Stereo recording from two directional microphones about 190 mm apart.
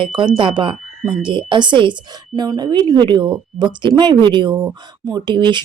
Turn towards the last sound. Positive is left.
turn(degrees=-25)  # may be behind; listen again after turning